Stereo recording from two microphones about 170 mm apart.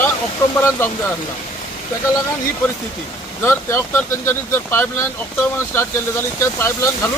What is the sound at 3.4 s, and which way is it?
Speech, 15° left (ahead or behind).